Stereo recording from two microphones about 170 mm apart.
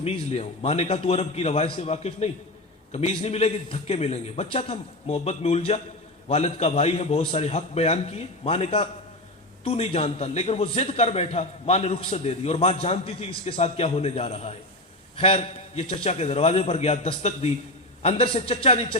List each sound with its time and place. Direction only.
0.0 s a man's voice: 35° left (ahead or behind)